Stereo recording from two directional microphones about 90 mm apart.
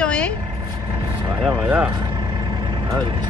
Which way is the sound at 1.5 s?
20° right (ahead or behind).